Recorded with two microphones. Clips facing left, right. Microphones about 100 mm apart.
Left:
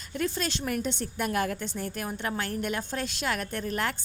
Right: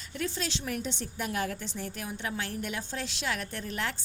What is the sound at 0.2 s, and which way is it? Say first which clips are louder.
A woman's voice: left 4 dB; 50° left (ahead or behind).